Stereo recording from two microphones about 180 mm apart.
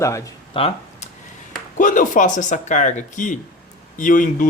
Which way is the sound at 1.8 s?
45° left (ahead or behind).